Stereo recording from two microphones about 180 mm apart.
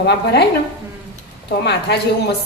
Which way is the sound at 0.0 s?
65° left (ahead or behind).